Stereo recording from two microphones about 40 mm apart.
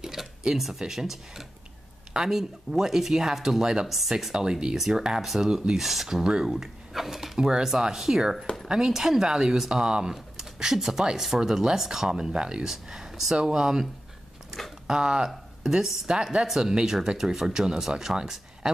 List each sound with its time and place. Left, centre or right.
0.0 s a sound: centre
0.6 s speech: centre
4.7 s speech: centre
6.2 s speech: centre
6.5 s speech: centre; by 12.6 s right
12.6 s speech: centre
14.9 s speech: right